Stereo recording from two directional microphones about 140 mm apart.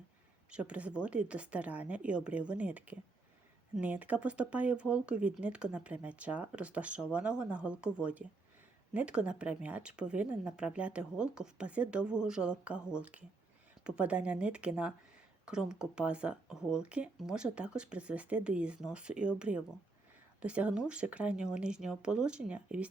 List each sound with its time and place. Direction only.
0.5 s speech: 10° right (ahead or behind)